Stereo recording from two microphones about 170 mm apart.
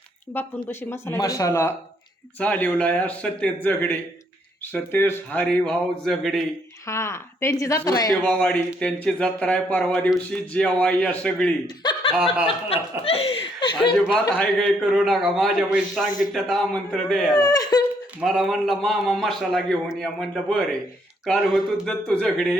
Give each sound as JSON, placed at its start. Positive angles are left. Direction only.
{"t": 0.3, "sound": "speech", "side_deg": 15}
{"t": 6.8, "sound": "a woman's voice", "side_deg": 15}
{"t": 8.2, "sound": "speech", "side_deg": 5}
{"t": 11.6, "sound": "chuckle", "side_deg": 25}
{"t": 12.1, "sound": "a man's voice", "side_deg": -5}
{"t": 12.6, "sound": "laughter", "side_deg": 35}
{"t": 14.8, "sound": "a man's voice", "side_deg": 0}
{"t": 17.3, "sound": "a woman's voice", "side_deg": 20}
{"t": 18.2, "sound": "a man's voice", "side_deg": 0}